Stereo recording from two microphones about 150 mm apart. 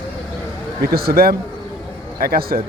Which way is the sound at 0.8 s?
90° right.